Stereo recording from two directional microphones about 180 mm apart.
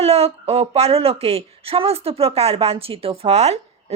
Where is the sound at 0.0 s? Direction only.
35° right (ahead or behind).